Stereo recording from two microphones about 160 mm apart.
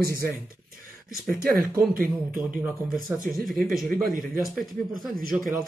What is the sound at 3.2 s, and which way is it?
Speech, 65° right (ahead or behind).